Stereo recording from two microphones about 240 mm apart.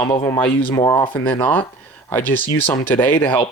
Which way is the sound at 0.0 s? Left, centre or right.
Centre.